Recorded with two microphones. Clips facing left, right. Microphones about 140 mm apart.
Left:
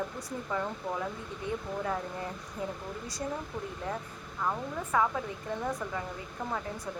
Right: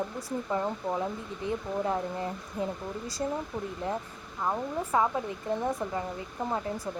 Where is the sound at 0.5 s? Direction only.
25° right (ahead or behind).